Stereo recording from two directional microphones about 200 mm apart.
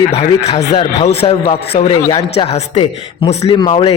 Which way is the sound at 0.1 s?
30° left (ahead or behind).